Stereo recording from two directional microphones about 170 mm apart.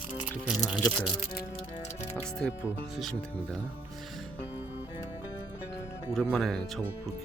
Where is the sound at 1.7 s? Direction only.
45° left (ahead or behind).